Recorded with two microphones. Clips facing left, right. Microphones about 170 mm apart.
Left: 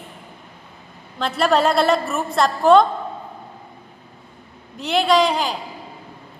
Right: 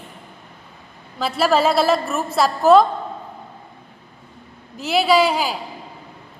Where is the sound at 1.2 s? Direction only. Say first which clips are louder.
Even; 5° right (ahead or behind).